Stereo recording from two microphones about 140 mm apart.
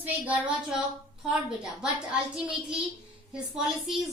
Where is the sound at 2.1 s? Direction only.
5° right (ahead or behind).